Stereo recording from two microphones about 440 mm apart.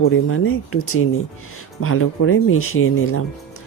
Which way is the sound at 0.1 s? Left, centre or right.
Left.